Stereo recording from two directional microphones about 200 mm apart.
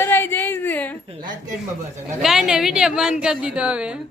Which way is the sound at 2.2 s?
Centre (ahead or behind).